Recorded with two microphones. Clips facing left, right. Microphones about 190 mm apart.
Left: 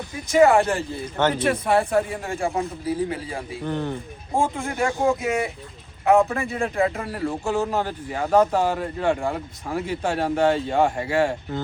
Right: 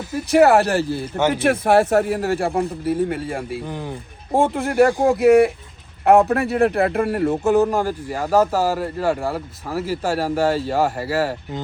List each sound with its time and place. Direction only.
0.1 s a man's voice: 70° right (ahead or behind)
1.2 s speech: 10° right (ahead or behind)
1.5 s a man's voice: 75° right (ahead or behind)
3.5 s speech: 10° right (ahead or behind)
4.4 s speech: 65° right (ahead or behind)
7.3 s a man's voice: 20° right (ahead or behind)